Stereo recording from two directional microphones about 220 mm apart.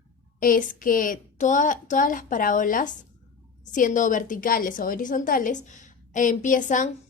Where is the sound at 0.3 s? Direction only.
40° left (ahead or behind).